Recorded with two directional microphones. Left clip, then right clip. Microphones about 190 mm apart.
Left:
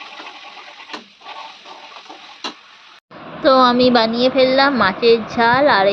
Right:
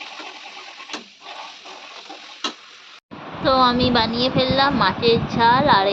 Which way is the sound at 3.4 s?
25° left (ahead or behind).